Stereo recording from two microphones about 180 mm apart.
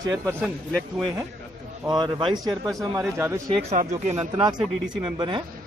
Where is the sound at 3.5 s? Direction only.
40° right (ahead or behind).